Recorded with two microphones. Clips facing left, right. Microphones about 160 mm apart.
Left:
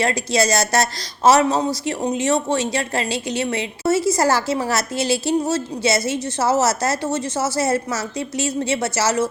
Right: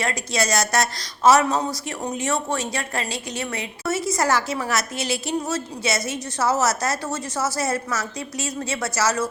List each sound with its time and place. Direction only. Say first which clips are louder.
0.0 s a woman's voice: left 5 dB; 30° left (ahead or behind)